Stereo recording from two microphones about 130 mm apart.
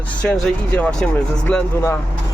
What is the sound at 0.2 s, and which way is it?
Speech, 10° left (ahead or behind).